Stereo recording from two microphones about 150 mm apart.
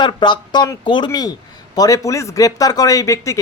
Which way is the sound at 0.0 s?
30° left (ahead or behind).